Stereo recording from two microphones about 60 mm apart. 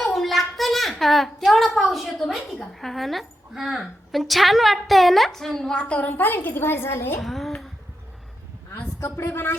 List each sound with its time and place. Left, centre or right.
0.0 s a sound: centre
1.5 s a woman's voice: centre
5.7 s a woman's voice: left
7.2 s a woman's voice: centre
8.7 s a woman's voice: left